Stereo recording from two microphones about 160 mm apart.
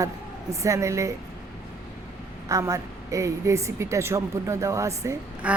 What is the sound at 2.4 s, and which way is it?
A woman's voice, 20° right (ahead or behind).